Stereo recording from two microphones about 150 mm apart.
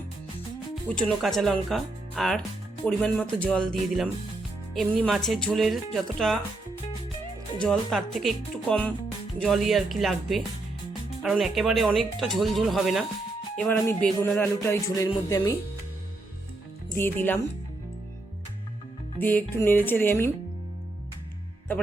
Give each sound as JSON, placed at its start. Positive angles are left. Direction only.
{"t": 0.9, "sound": "speech", "side_deg": 5}
{"t": 7.6, "sound": "speech", "side_deg": 5}
{"t": 14.0, "sound": "music", "side_deg": 10}
{"t": 17.0, "sound": "music", "side_deg": 15}
{"t": 19.2, "sound": "music", "side_deg": 10}